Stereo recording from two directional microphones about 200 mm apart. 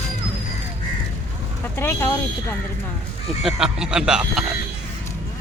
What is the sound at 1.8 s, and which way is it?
Speech, 10° left (ahead or behind).